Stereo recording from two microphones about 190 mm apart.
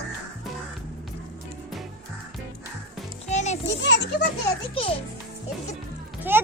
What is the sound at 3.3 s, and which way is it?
Music, 35° left (ahead or behind).